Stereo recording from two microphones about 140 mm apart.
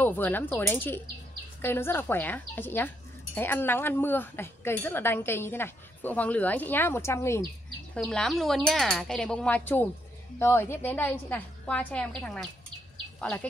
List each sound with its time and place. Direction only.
0.0 s a woman's voice: 15° left (ahead or behind)
7.9 s a woman's voice: 5° left (ahead or behind)